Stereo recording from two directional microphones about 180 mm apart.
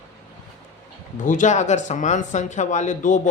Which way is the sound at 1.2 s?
45° left (ahead or behind).